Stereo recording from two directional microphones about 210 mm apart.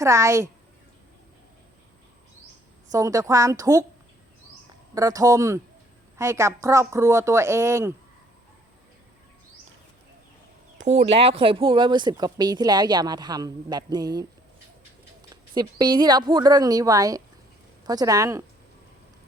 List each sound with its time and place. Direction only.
0.0 s a woman's voice: 15° right (ahead or behind)
2.9 s a woman's voice: 15° right (ahead or behind)
4.9 s a woman's voice: 15° right (ahead or behind)
10.8 s speech: 30° right (ahead or behind)
15.5 s a woman's voice: 20° right (ahead or behind)